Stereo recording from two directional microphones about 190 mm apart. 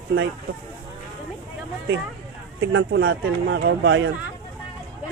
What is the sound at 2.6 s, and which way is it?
Speech, 85° right.